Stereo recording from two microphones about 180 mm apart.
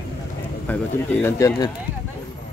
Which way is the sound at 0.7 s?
10° left (ahead or behind).